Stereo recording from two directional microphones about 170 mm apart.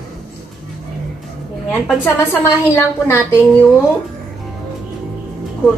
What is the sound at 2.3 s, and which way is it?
A woman's voice, 15° left (ahead or behind).